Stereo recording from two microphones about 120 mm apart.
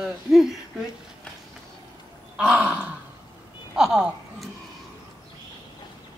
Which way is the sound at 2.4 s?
10° right (ahead or behind).